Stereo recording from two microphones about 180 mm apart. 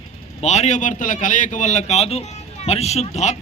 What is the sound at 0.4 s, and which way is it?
A man's voice, 40° left (ahead or behind).